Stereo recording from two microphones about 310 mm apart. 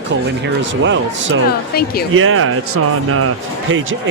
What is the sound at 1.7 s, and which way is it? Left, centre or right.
Speech, left.